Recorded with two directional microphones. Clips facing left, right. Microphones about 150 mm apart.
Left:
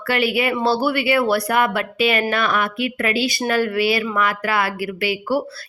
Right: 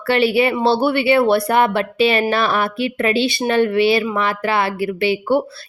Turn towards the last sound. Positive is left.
turn(degrees=-25)  # may be behind; listen again after turning